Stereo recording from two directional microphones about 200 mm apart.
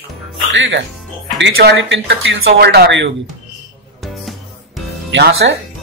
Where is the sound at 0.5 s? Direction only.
65° right (ahead or behind).